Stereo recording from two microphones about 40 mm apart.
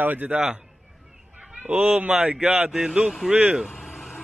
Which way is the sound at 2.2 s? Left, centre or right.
Right.